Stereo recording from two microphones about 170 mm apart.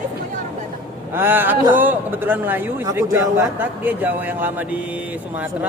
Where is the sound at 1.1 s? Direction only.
10° right (ahead or behind).